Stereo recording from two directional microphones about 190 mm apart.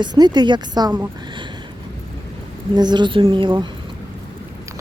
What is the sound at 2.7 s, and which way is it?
Speech, 25° right (ahead or behind).